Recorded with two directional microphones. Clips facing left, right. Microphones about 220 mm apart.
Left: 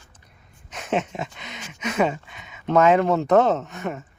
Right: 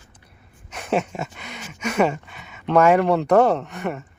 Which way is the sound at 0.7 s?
10° right (ahead or behind).